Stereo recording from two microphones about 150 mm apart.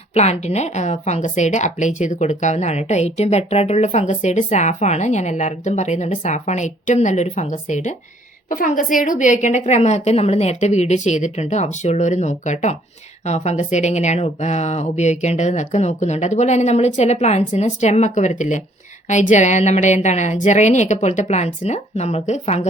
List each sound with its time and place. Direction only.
0.1 s a woman's voice: 45° left (ahead or behind)
8.4 s a woman's voice: 65° left (ahead or behind); by 22.7 s 45° left (ahead or behind)